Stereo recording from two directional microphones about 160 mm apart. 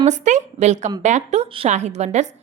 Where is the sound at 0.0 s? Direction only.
50° right (ahead or behind).